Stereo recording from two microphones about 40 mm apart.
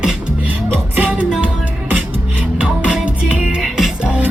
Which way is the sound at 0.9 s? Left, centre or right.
Right.